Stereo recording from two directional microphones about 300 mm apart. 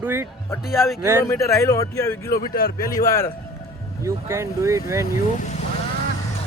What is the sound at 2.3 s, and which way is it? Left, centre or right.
Speech, left.